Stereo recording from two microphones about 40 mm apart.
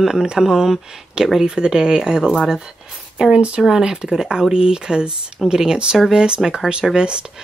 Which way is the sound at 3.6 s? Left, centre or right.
Centre.